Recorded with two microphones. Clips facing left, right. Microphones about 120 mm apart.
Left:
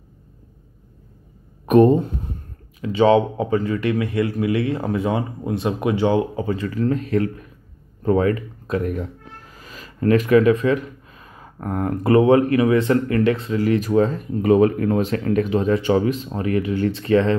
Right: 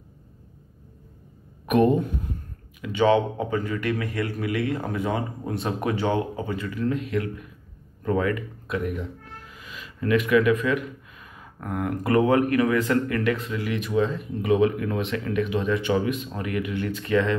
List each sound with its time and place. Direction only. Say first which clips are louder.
1.7 s a man's voice: left 6 dB; 35° left (ahead or behind)
6.3 s speech: left 6 dB; 35° left (ahead or behind)